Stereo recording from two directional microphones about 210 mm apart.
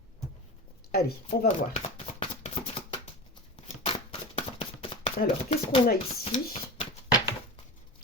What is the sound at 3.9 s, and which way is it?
Chopping, 25° left (ahead or behind).